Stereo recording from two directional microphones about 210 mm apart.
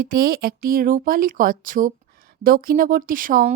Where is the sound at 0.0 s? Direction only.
45° right (ahead or behind).